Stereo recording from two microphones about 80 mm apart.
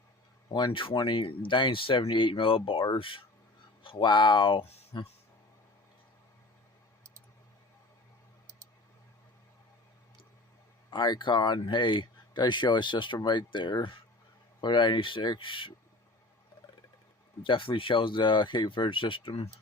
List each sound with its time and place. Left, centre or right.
0.5 s speech: left
10.9 s speech: left
17.4 s speech: left